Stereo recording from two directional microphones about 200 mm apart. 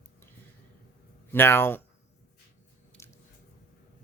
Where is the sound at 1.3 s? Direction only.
10° left (ahead or behind).